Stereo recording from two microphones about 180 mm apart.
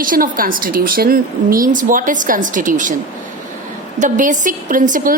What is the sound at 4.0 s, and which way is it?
A woman's voice, 45° right (ahead or behind).